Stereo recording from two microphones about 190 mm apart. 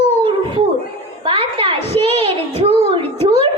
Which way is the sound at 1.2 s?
30° right (ahead or behind).